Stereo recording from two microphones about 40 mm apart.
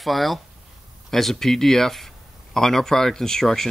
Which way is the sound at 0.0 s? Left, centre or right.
Centre.